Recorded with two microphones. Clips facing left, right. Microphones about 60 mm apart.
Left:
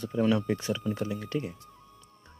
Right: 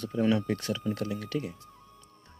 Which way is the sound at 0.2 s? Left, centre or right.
Centre.